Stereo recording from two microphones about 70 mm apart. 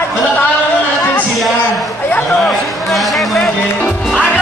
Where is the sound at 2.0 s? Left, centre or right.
Left.